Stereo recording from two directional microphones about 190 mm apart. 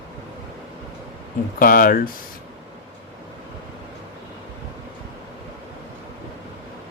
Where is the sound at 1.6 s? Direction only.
50° left (ahead or behind).